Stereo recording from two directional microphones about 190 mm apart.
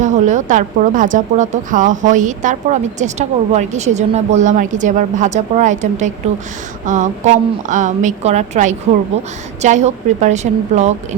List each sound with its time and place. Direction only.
0.0 s speech: 40° right (ahead or behind)